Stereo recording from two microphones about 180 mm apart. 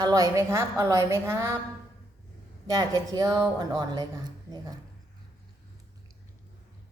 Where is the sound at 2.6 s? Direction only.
20° right (ahead or behind).